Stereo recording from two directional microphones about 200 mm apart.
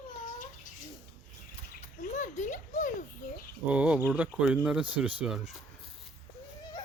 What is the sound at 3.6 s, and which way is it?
Speech, 5° right (ahead or behind).